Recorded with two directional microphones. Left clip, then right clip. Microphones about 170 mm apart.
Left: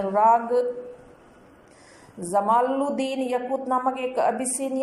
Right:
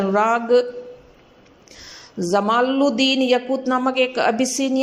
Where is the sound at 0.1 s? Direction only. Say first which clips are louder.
Left 1 dB; 80° right.